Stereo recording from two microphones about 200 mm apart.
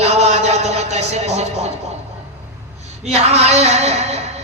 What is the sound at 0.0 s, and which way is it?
Music, 35° right (ahead or behind).